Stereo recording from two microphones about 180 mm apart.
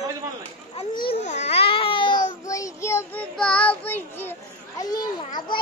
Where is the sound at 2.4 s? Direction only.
20° left (ahead or behind).